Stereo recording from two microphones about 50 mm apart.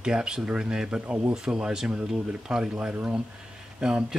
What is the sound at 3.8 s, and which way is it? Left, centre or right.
Speech, centre.